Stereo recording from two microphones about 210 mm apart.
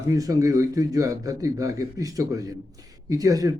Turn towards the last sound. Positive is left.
turn(degrees=-15)  # may be behind; listen again after turning